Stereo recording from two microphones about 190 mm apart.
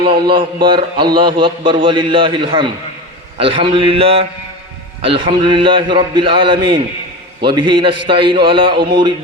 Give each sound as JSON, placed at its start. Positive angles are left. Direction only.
{"t": 0.2, "sound": "a man's voice", "side_deg": -25}